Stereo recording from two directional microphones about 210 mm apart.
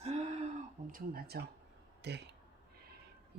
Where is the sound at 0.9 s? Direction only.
50° right (ahead or behind).